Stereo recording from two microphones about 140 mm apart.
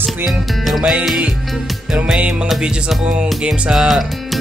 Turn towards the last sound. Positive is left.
turn(degrees=0)  # may be behind; listen again after turning